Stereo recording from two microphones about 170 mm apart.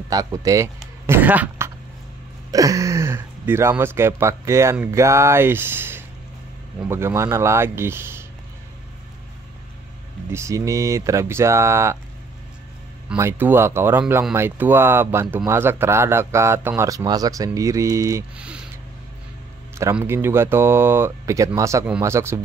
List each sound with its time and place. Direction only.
0.1 s speech: 20° right (ahead or behind)
2.5 s speech: 20° right (ahead or behind)
10.3 s speech: 20° right (ahead or behind)
13.1 s speech: 10° right (ahead or behind)
18.4 s speech: 5° right (ahead or behind)
19.8 s speech: 15° right (ahead or behind)